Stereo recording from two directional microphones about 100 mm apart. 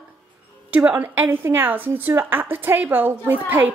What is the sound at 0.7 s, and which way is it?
A woman's voice, 15° right (ahead or behind).